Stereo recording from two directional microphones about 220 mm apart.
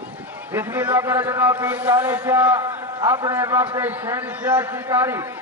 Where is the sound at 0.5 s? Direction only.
10° right (ahead or behind).